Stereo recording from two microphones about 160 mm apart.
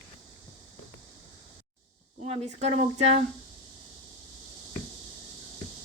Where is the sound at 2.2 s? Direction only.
45° right (ahead or behind).